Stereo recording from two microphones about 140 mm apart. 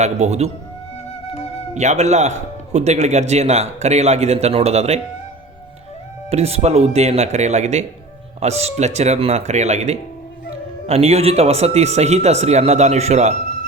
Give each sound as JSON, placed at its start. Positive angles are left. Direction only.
{"t": 0.0, "sound": "a man's voice", "side_deg": -50}
{"t": 1.7, "sound": "a man's voice", "side_deg": -55}
{"t": 6.3, "sound": "a man's voice", "side_deg": -50}